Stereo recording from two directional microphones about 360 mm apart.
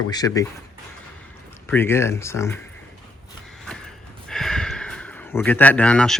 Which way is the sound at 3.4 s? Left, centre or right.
Centre.